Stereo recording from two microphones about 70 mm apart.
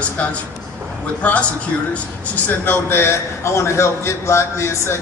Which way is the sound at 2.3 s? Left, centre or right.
Left.